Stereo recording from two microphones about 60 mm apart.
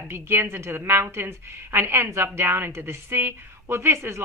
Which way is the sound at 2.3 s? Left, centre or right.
Right.